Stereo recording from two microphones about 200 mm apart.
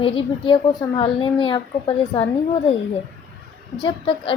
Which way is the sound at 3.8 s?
25° left (ahead or behind).